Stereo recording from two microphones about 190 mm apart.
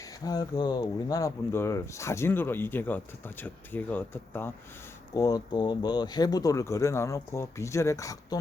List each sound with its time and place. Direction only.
0.3 s speech: 20° left (ahead or behind)